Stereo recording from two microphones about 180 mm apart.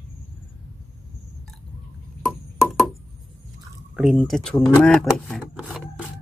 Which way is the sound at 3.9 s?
Centre (ahead or behind).